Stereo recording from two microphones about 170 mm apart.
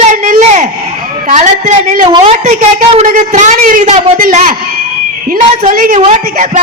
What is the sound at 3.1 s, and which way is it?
A man's voice, 45° right (ahead or behind).